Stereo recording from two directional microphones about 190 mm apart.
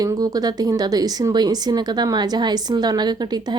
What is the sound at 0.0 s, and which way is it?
Speech, 20° right (ahead or behind).